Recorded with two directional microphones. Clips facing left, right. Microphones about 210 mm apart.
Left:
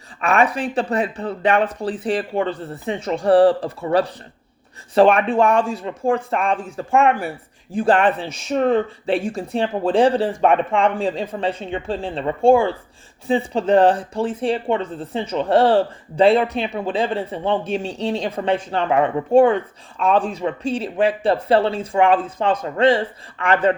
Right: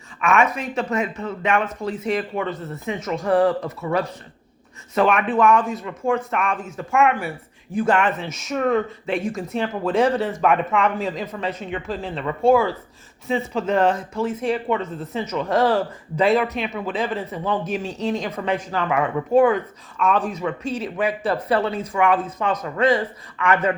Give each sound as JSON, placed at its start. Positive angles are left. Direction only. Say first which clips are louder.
{"t": 0.2, "sound": "speech", "louder": "left 2 dB", "side_deg": 35}